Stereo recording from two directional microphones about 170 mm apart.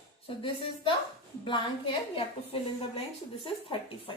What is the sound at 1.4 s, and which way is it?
A woman's voice, 30° left (ahead or behind).